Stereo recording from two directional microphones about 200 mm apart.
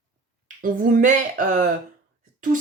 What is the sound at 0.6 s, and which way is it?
Speech, 45° right (ahead or behind).